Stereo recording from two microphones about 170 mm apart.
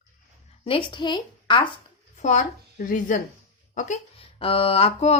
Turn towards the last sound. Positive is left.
turn(degrees=40)  # may be behind; listen again after turning